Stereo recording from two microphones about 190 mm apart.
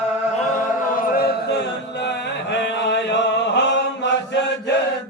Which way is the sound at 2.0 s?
65° left (ahead or behind).